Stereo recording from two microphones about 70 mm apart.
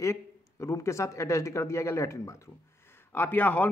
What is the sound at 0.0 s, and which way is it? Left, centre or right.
Speech, left.